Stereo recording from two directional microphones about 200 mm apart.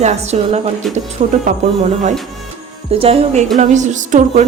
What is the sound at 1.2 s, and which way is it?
Speech, 35° right (ahead or behind).